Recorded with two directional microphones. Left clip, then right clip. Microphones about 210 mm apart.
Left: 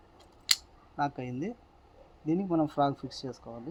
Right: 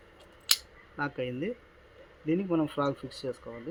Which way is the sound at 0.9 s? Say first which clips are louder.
Even; 45° left (ahead or behind).